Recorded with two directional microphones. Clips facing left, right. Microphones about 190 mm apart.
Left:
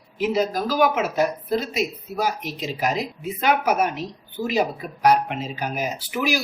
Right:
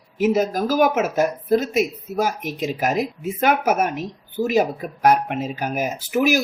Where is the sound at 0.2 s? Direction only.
45° right (ahead or behind).